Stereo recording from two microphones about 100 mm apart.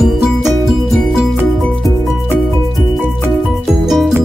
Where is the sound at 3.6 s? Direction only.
Centre (ahead or behind).